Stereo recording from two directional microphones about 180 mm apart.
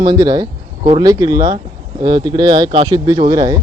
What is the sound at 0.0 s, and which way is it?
A man's voice, 25° right (ahead or behind).